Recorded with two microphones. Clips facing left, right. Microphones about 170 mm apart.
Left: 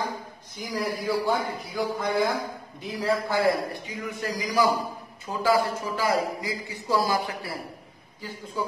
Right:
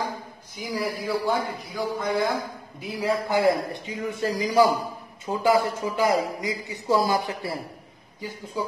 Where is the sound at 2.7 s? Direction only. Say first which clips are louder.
Right 1 dB; 10° right (ahead or behind).